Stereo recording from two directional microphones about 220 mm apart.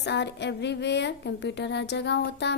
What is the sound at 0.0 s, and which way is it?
A woman's voice, 50° left (ahead or behind).